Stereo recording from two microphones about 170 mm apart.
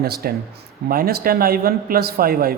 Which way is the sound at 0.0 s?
65° right (ahead or behind).